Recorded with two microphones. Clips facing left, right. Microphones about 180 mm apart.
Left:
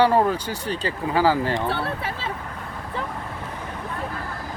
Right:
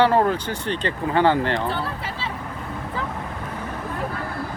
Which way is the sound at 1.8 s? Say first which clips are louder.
Left 1 dB; 60° left (ahead or behind).